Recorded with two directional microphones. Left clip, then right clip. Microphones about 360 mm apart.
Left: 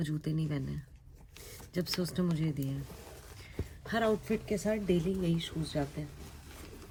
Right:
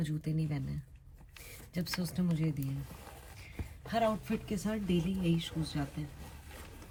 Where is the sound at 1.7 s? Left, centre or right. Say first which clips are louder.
Left 4 dB; centre.